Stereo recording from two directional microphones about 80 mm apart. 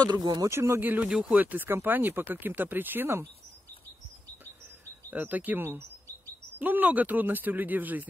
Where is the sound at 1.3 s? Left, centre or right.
Right.